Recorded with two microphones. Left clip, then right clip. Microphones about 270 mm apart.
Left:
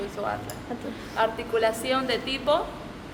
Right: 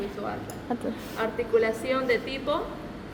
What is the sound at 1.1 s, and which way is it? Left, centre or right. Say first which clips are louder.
A woman's voice: left 1 dB; left.